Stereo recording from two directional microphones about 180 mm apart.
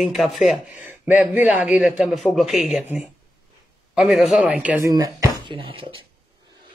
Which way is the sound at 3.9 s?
5° right (ahead or behind).